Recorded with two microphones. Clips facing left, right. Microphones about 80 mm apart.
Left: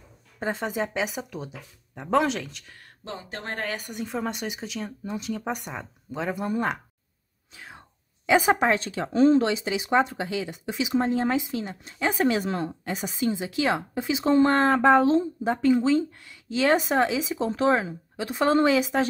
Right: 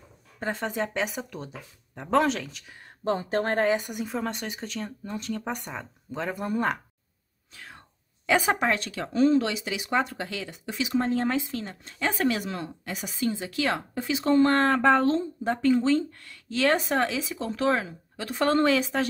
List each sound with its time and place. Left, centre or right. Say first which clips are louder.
0.4 s speech: left 1 dB; centre
3.0 s speech: right 11 dB; right
3.6 s speech: right 8 dB; centre
3.9 s speech: even; centre
4.2 s speech: left 1 dB; centre
7.5 s speech: left 1 dB; centre